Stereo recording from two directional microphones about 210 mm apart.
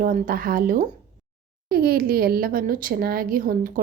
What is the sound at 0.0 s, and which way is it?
A woman's voice, 40° right (ahead or behind).